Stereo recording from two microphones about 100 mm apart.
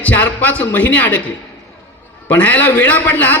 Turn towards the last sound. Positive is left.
turn(degrees=15)  # may be behind; listen again after turning